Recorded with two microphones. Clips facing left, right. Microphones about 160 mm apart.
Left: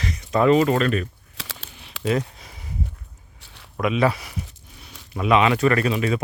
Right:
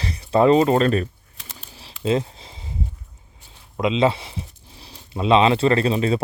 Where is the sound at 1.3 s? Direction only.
90° left.